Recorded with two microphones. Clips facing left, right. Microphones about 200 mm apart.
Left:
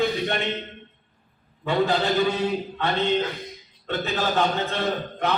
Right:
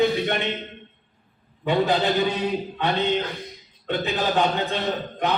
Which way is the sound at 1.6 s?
20° right (ahead or behind).